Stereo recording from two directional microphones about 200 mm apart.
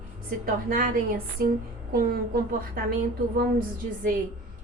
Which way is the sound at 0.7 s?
45° right (ahead or behind).